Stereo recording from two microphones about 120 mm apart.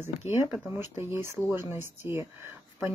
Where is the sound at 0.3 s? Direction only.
20° right (ahead or behind).